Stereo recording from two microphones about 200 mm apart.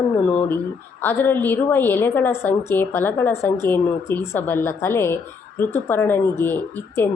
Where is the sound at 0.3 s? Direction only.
10° left (ahead or behind).